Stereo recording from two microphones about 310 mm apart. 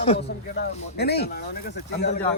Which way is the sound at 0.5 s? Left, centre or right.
Left.